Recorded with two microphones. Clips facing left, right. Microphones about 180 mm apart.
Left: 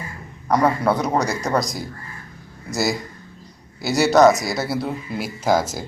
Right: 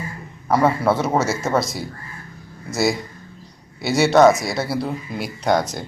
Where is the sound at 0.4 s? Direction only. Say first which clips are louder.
Right 1 dB; 5° right (ahead or behind).